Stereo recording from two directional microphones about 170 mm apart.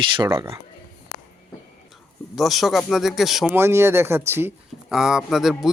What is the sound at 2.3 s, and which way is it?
A man's voice, centre (ahead or behind).